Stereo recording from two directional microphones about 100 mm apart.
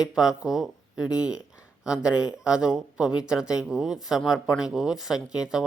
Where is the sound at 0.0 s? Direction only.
5° right (ahead or behind).